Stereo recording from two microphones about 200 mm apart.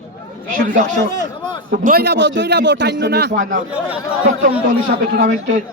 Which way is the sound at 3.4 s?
40° right (ahead or behind).